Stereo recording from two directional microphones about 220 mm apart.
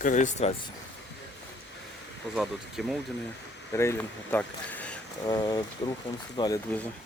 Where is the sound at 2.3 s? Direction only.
Centre (ahead or behind).